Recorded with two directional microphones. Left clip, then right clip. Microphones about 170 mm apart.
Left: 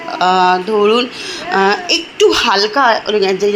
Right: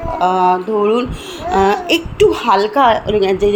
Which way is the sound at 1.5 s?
15° right (ahead or behind).